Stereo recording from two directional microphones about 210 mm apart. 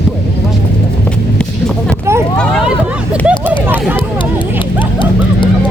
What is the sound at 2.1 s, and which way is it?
Vehicle, 15° right (ahead or behind).